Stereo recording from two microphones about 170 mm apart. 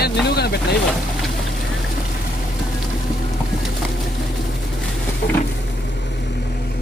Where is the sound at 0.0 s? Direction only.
70° left (ahead or behind).